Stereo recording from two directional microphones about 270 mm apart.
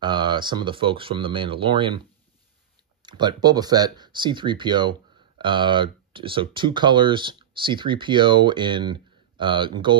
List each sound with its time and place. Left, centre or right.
0.0 s speech: centre
3.0 s speech: centre